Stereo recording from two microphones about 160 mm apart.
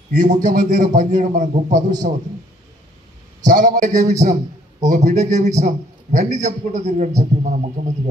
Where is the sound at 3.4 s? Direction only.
50° right (ahead or behind).